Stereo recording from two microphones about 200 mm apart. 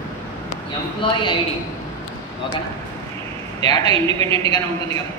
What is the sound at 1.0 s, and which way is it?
Speech, 25° left (ahead or behind).